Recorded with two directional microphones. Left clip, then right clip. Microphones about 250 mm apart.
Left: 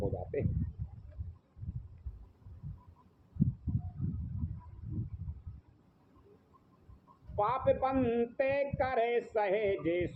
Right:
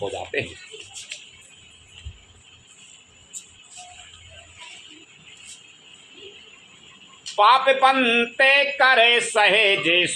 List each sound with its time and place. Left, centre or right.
7.3 s speech: right